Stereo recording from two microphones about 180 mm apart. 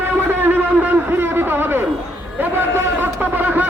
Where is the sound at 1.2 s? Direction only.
10° right (ahead or behind).